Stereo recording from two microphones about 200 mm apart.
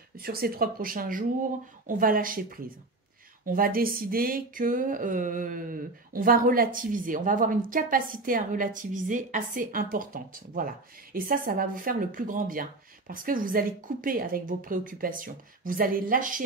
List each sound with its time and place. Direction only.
0.2 s speech: 50° right (ahead or behind)